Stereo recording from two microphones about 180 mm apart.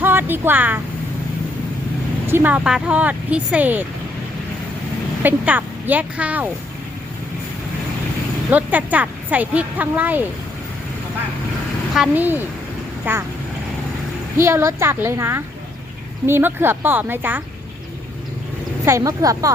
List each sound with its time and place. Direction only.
0.0 s speech: 10° right (ahead or behind)
2.2 s speech: 10° right (ahead or behind)
5.2 s speech: 10° right (ahead or behind)
8.4 s speech: 10° right (ahead or behind)
11.9 s speech: 10° right (ahead or behind)
14.3 s speech: 15° right (ahead or behind)
18.9 s speech: 15° right (ahead or behind)